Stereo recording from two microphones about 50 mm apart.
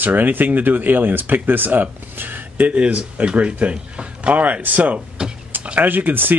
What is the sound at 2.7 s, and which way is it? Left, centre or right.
Speech, right.